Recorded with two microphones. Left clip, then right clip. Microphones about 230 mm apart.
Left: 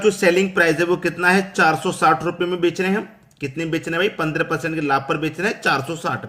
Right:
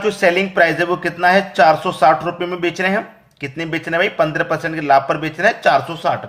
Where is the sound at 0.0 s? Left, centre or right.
Centre.